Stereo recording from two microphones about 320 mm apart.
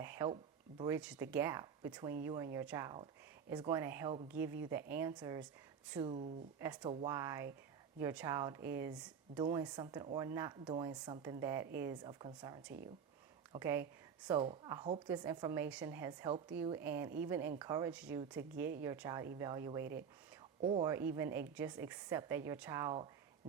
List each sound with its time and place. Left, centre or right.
0.0 s a woman's voice: centre